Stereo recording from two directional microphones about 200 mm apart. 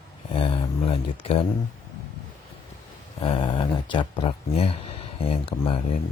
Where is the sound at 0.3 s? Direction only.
25° left (ahead or behind).